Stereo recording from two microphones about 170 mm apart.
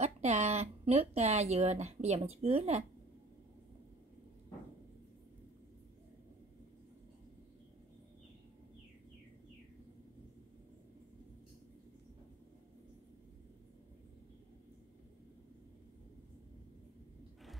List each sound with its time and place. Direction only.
0.0 s speech: 40° right (ahead or behind)